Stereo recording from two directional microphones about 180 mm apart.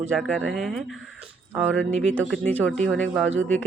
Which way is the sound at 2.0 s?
5° left (ahead or behind).